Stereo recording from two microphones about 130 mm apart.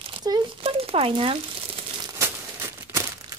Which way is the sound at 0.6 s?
50° right (ahead or behind).